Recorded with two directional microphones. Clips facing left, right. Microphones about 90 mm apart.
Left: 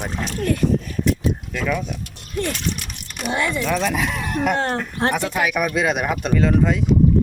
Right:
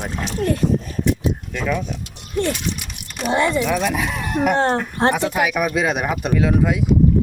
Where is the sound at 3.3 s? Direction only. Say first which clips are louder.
Right 4 dB; 30° right (ahead or behind).